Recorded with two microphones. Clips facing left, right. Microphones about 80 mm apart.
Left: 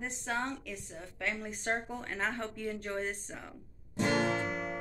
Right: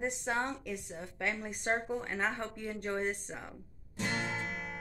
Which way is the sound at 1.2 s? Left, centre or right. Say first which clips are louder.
Right 1 dB; centre.